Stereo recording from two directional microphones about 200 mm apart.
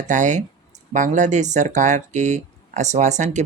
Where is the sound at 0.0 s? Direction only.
40° right (ahead or behind).